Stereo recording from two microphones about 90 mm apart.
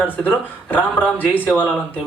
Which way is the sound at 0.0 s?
20° left (ahead or behind).